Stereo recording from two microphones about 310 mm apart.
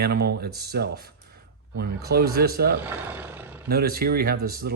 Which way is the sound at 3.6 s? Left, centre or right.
Right.